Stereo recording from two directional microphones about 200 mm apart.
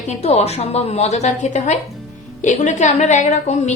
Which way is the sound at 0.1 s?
30° left (ahead or behind).